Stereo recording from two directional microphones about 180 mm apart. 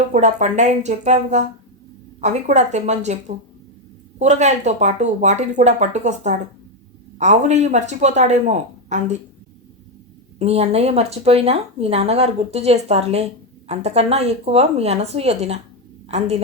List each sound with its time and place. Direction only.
0.1 s speech: 40° right (ahead or behind)
10.3 s a woman's voice: 35° right (ahead or behind)